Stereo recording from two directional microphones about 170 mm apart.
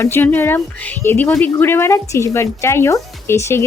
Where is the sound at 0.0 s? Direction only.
15° left (ahead or behind).